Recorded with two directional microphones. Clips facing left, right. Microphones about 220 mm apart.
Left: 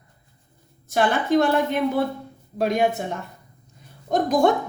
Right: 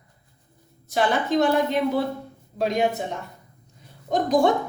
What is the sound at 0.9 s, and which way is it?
A woman's voice, 55° left (ahead or behind).